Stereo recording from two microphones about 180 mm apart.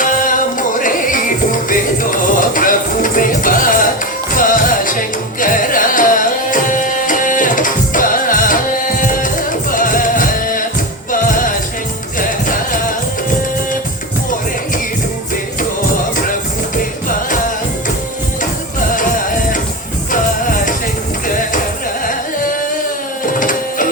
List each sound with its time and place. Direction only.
0.0 s music: 45° left (ahead or behind)
16.7 s music: 50° left (ahead or behind)
18.9 s music: 50° left (ahead or behind)
23.2 s printer: 50° left (ahead or behind)